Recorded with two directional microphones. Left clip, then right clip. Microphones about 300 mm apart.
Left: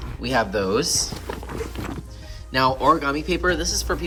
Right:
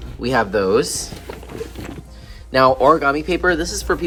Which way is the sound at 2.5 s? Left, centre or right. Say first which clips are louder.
Right 6 dB; centre.